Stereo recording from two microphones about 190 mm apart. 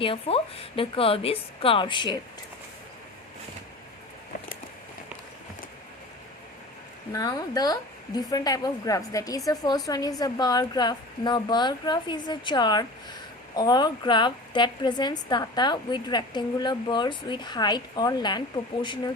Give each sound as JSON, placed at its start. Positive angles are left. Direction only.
{"t": 0.0, "sound": "a woman's voice", "side_deg": 30}
{"t": 7.1, "sound": "a woman's voice", "side_deg": 20}